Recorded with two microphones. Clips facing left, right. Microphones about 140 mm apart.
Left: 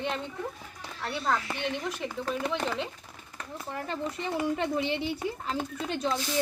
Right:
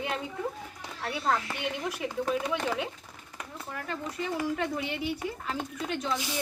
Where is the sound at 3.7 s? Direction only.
25° left (ahead or behind).